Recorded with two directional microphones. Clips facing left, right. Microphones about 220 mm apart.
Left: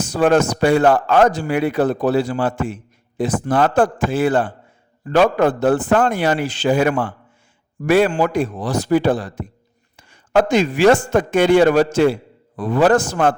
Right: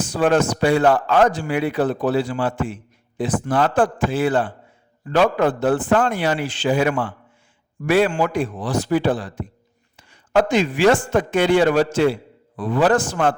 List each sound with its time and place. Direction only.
0.0 s a man's voice: 40° left (ahead or behind)